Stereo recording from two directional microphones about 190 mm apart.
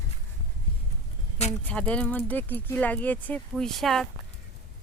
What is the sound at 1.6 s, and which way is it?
Speech, 5° left (ahead or behind).